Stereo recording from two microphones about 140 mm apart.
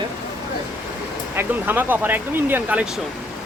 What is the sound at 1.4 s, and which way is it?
Speech, 15° right (ahead or behind).